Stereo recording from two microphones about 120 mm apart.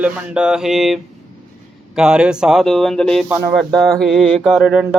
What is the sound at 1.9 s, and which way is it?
Speech, 5° right (ahead or behind).